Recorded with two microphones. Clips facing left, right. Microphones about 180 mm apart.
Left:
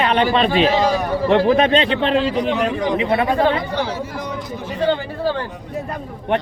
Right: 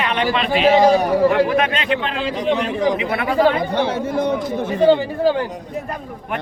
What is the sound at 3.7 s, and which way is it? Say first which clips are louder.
Speech: right 4 dB; 55° right (ahead or behind).